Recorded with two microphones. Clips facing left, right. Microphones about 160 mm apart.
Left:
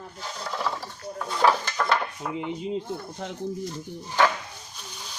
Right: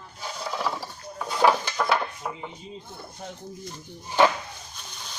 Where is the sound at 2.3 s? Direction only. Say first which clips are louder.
Left 10 dB; 75° left (ahead or behind).